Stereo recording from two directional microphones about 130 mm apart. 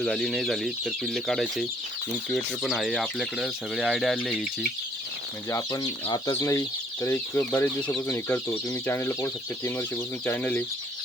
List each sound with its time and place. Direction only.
0.0 s speech: 5° left (ahead or behind)
5.5 s speech: 25° left (ahead or behind)